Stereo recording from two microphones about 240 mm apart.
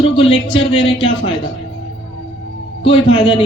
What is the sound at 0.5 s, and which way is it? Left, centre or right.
Speech, left.